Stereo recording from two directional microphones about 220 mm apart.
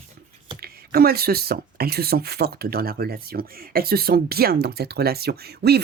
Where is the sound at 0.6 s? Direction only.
45° right (ahead or behind).